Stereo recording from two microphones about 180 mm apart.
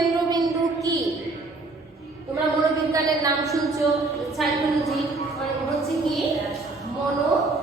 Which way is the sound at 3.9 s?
Centre (ahead or behind).